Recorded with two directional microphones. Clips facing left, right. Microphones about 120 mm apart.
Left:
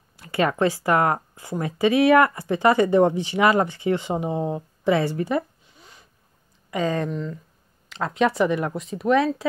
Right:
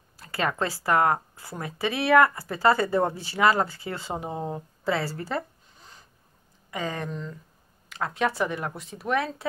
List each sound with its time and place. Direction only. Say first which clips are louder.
0.2 s speech: left 6 dB; 25° left (ahead or behind)
6.7 s speech: left 7 dB; 15° right (ahead or behind)
7.1 s speech: left 6 dB; centre (ahead or behind)
7.9 s speech: left 5 dB; 20° left (ahead or behind)